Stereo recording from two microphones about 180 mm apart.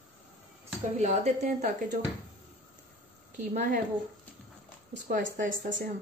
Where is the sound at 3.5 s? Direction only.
45° right (ahead or behind).